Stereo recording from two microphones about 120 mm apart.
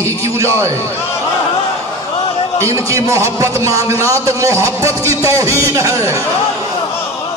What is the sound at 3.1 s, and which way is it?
A man's voice, 25° right (ahead or behind).